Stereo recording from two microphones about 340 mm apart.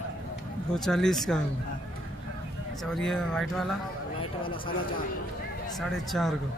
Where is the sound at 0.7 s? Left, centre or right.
Centre.